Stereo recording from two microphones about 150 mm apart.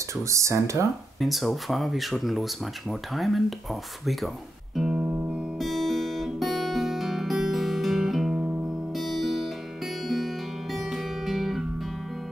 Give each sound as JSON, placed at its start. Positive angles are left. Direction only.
{"t": 0.1, "sound": "speech", "side_deg": -20}
{"t": 1.2, "sound": "speech", "side_deg": 0}
{"t": 4.7, "sound": "music", "side_deg": -5}
{"t": 5.6, "sound": "guitar", "side_deg": 0}
{"t": 8.9, "sound": "music", "side_deg": 0}